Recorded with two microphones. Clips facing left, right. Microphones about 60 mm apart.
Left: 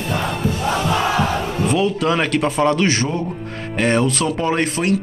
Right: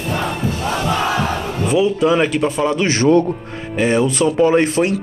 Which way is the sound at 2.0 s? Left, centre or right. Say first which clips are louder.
Right 3 dB; centre.